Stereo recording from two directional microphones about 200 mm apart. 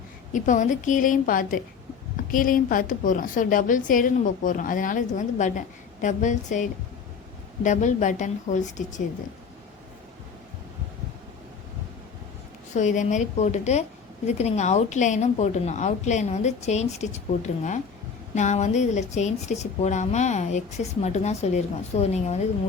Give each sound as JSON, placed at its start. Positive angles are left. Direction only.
{"t": 0.3, "sound": "a woman's voice", "side_deg": 40}
{"t": 12.7, "sound": "a woman's voice", "side_deg": 40}